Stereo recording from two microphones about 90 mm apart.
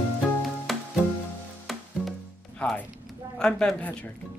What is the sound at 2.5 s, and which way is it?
Music, 15° left (ahead or behind).